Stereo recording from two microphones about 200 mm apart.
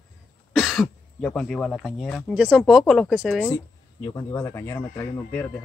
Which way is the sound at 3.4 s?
15° left (ahead or behind).